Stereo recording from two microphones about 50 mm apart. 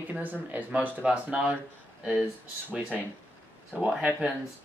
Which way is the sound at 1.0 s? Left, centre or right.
Centre.